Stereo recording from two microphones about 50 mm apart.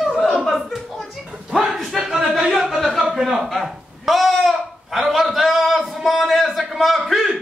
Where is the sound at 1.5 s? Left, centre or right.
Centre.